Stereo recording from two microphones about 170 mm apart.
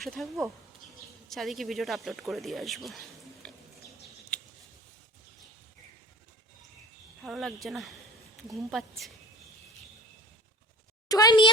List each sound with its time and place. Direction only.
0.0 s speech: centre (ahead or behind)
3.4 s a sound: 5° left (ahead or behind)
4.3 s scissors: 5° left (ahead or behind)
7.2 s a woman's voice: centre (ahead or behind)
11.1 s speech: 25° left (ahead or behind)